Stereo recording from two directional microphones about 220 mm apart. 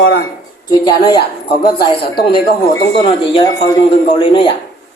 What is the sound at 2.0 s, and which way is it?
Speech, 45° left (ahead or behind).